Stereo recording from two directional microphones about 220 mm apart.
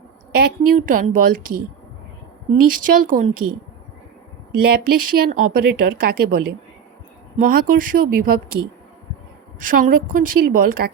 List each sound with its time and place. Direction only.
0.3 s a woman's voice: 40° right (ahead or behind)
2.6 s a woman's voice: 40° right (ahead or behind)
4.6 s a woman's voice: 40° right (ahead or behind)
9.6 s a woman's voice: 40° right (ahead or behind)